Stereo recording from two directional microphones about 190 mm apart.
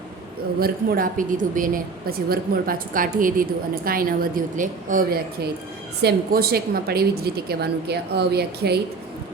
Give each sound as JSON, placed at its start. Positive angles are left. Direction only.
{"t": 0.6, "sound": "a woman's voice", "side_deg": -50}